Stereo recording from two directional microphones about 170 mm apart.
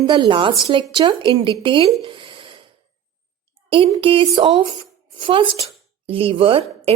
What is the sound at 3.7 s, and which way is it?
A woman's voice, 30° right (ahead or behind).